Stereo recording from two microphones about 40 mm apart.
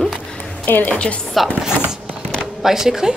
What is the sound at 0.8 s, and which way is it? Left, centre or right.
Speech, left.